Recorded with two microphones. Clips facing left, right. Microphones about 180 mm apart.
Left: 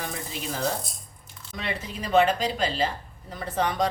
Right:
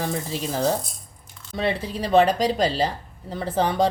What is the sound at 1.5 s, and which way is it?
Speech, 30° right (ahead or behind).